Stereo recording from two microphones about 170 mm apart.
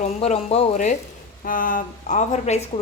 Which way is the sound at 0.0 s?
40° left (ahead or behind).